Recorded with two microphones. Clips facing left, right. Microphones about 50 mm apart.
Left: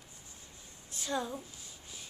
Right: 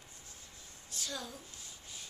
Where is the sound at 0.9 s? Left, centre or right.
Left.